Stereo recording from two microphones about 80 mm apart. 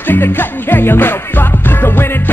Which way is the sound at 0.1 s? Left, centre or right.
Left.